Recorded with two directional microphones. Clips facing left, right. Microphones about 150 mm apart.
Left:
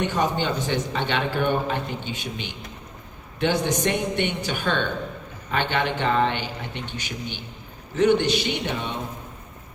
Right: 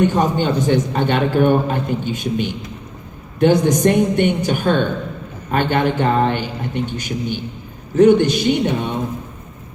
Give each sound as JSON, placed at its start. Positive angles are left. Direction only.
{"t": 0.0, "sound": "a man's voice", "side_deg": -45}